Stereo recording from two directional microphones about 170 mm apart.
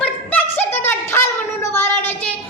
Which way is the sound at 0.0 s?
10° left (ahead or behind).